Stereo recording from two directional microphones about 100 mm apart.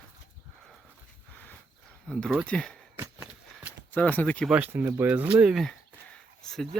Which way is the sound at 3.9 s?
15° left (ahead or behind).